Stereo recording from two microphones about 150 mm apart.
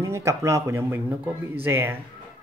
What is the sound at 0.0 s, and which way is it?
Speech, 20° right (ahead or behind).